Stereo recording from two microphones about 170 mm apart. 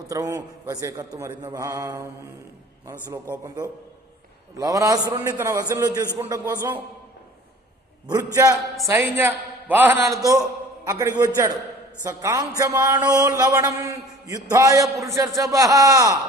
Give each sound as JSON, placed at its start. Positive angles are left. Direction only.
{"t": 0.1, "sound": "a man's voice", "side_deg": -20}
{"t": 3.4, "sound": "a man's voice", "side_deg": -20}
{"t": 8.1, "sound": "a man's voice", "side_deg": -20}